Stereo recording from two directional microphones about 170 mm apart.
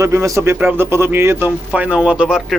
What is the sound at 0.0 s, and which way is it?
Speech, 15° right (ahead or behind).